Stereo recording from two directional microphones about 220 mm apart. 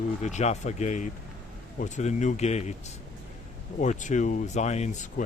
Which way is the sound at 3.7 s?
35° left (ahead or behind).